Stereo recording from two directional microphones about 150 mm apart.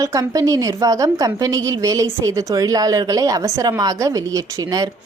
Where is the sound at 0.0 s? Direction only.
20° right (ahead or behind).